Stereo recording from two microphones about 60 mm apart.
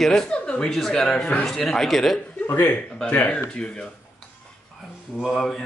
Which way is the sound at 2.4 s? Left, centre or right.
Left.